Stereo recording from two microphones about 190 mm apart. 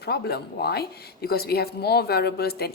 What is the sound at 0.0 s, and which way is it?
A woman's voice, 55° left (ahead or behind).